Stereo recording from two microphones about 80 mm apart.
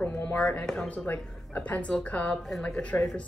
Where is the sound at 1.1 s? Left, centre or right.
Left.